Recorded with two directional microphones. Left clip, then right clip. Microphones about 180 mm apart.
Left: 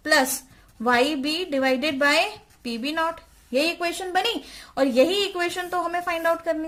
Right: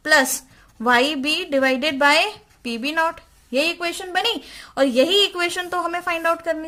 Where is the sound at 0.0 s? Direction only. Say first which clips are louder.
Right 4 dB; 35° right (ahead or behind).